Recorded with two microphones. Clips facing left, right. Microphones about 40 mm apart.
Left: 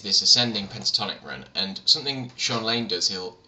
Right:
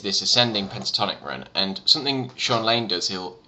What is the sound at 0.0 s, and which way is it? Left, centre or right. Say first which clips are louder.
Speech: right 2 dB; right.